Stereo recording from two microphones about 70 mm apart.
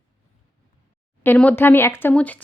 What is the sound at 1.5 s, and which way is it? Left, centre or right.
Speech, left.